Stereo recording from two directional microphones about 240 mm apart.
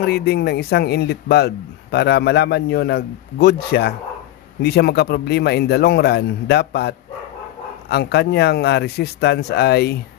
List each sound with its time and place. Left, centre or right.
0.0 s a man's voice: left